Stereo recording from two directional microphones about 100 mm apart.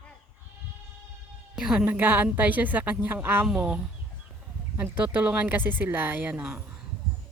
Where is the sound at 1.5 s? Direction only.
5° right (ahead or behind).